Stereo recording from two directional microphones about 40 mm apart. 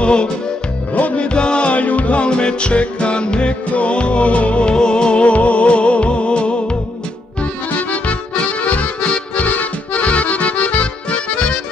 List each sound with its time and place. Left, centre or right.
0.0 s music: left
7.9 s accordion: left
9.0 s music: left
9.4 s accordion: left